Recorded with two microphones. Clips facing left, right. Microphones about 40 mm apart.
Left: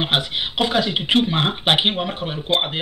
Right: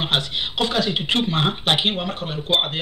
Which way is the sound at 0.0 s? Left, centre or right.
Centre.